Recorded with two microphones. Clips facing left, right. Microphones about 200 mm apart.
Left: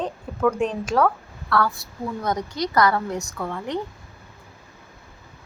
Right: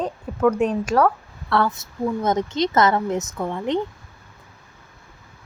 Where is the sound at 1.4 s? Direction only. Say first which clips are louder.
Right 2 dB; 25° right (ahead or behind).